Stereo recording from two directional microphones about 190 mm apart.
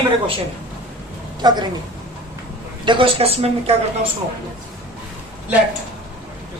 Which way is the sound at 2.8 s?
25° right (ahead or behind).